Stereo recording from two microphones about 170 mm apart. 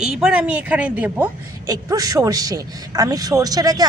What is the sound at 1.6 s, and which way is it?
Speech, 20° right (ahead or behind).